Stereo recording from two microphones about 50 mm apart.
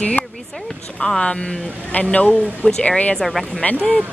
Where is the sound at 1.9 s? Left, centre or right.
Left.